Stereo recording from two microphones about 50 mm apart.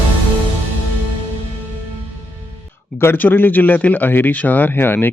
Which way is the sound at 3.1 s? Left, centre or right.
Left.